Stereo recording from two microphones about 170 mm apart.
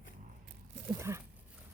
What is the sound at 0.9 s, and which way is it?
Speech, 15° right (ahead or behind).